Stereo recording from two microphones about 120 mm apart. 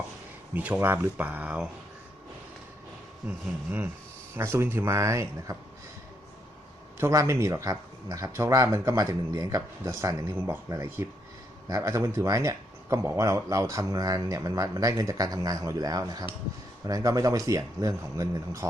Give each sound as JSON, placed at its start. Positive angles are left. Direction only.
{"t": 0.5, "sound": "speech", "side_deg": -10}
{"t": 3.2, "sound": "speech", "side_deg": -15}
{"t": 7.0, "sound": "speech", "side_deg": -25}